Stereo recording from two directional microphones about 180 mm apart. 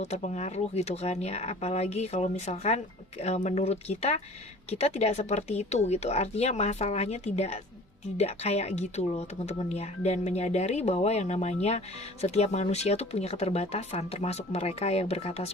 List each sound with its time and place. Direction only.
0.0 s speech: 40° left (ahead or behind)